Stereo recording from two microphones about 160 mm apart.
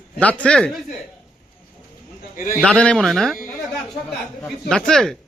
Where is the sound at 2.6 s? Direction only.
5° left (ahead or behind).